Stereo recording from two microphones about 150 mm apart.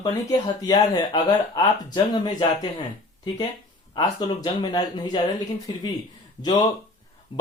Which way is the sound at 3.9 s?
25° left (ahead or behind).